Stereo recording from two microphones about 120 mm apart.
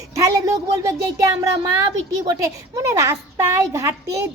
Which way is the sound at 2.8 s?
20° right (ahead or behind).